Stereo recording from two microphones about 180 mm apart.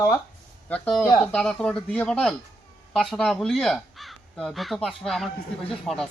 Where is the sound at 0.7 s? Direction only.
5° left (ahead or behind).